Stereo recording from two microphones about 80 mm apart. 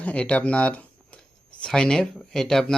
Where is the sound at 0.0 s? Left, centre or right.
Centre.